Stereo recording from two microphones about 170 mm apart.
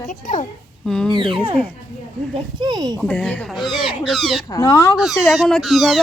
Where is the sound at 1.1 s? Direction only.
30° right (ahead or behind).